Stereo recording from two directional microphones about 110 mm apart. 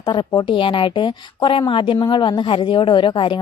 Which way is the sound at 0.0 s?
45° left (ahead or behind).